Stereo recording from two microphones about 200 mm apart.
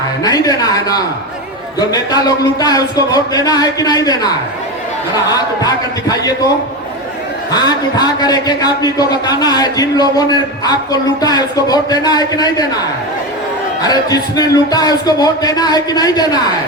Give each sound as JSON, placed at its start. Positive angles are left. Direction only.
{"t": 0.2, "sound": "a man's voice", "side_deg": 20}
{"t": 7.5, "sound": "a man's voice", "side_deg": 20}
{"t": 13.8, "sound": "a man's voice", "side_deg": 20}